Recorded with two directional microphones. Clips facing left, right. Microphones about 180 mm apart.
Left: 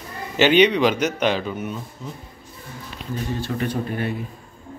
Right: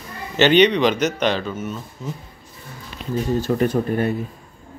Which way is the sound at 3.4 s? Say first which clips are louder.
Right 6 dB; 45° right (ahead or behind).